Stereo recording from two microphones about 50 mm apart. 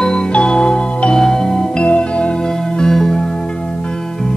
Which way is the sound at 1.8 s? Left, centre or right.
Left.